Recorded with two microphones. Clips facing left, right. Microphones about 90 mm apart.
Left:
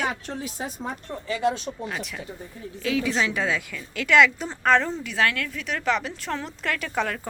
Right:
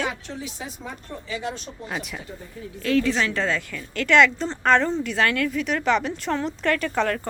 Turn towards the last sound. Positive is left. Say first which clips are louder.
# right 4 dB
turn(degrees=5)  # may be behind; listen again after turning